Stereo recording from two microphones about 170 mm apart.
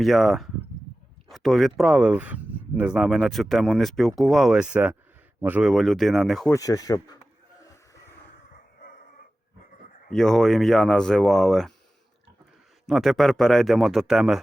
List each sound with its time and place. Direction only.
0.0 s speech: centre (ahead or behind)
6.5 s speech: 20° left (ahead or behind)
10.1 s speech: centre (ahead or behind)
12.9 s speech: centre (ahead or behind)